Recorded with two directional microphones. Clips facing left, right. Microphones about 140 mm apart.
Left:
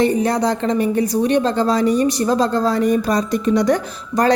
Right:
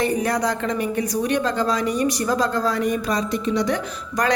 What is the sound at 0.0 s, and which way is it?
A woman's voice, 25° left (ahead or behind).